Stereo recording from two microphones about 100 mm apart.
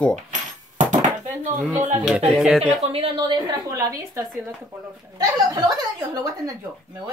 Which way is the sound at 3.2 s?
50° right (ahead or behind).